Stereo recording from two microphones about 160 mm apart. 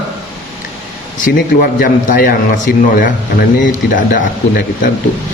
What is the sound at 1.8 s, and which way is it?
A man's voice, 60° left (ahead or behind).